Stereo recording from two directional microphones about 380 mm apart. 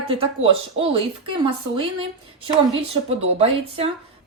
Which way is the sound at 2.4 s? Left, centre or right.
Centre.